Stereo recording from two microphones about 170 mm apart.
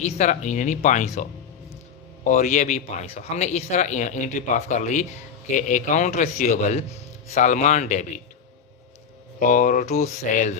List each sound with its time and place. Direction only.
0.0 s speech: 45° left (ahead or behind)
2.2 s speech: 45° left (ahead or behind)
9.4 s speech: 50° left (ahead or behind)